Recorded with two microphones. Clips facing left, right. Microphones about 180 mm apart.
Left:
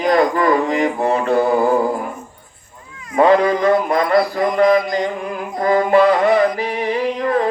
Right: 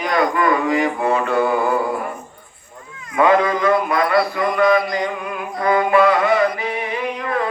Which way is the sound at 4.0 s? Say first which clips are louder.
Left 2 dB; 25° left (ahead or behind).